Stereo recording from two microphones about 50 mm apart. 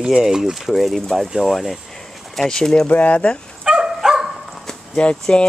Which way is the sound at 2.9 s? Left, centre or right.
Left.